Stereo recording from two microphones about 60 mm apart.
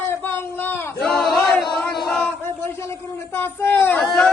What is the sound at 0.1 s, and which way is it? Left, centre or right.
Child singing, left.